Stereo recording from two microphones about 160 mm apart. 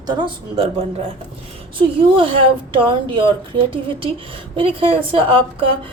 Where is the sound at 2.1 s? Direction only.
35° right (ahead or behind).